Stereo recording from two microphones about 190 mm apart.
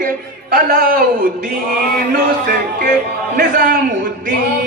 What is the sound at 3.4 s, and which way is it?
Speech, 50° right (ahead or behind).